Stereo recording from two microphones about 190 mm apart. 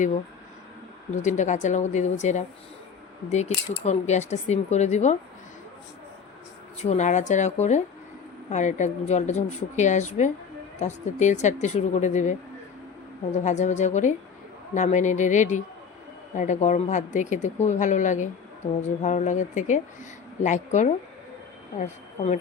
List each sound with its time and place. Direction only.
1.1 s speech: 40° left (ahead or behind)
6.8 s speech: 40° left (ahead or behind)